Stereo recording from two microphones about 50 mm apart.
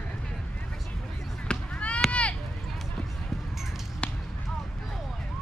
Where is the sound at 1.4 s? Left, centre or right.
Left.